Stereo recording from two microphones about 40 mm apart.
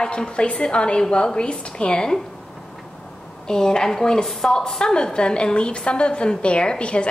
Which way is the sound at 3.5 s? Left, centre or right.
Centre.